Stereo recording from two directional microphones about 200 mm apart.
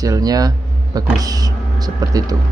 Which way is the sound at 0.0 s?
15° right (ahead or behind).